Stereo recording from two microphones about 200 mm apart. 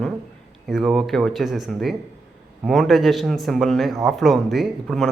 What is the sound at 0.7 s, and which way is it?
Speech, centre (ahead or behind).